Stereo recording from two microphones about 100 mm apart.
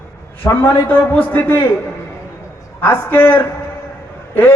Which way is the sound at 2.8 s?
20° left (ahead or behind).